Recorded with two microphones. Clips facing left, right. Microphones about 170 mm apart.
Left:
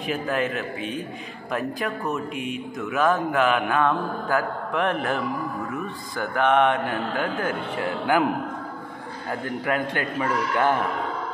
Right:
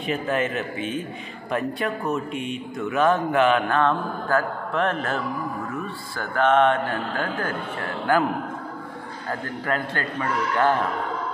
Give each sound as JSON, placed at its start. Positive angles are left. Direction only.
{"t": 0.0, "sound": "a man's voice", "side_deg": 0}
{"t": 9.7, "sound": "a man's voice", "side_deg": 15}